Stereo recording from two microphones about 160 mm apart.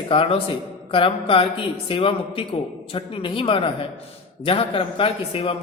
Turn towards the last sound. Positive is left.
turn(degrees=35)  # may be behind; listen again after turning